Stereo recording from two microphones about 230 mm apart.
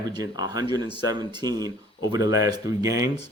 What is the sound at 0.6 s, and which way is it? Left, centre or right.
Speech, left.